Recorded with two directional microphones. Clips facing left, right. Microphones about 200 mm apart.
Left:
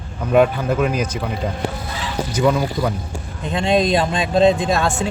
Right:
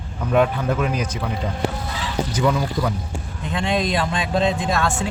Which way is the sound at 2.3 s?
5° left (ahead or behind).